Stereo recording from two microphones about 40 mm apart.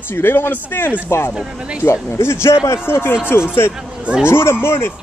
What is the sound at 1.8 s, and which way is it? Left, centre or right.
Speech, left.